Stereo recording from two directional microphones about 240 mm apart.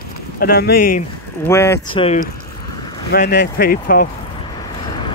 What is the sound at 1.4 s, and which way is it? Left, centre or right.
Speech, centre.